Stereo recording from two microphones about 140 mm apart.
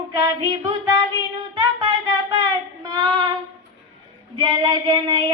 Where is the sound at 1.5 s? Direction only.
35° right (ahead or behind).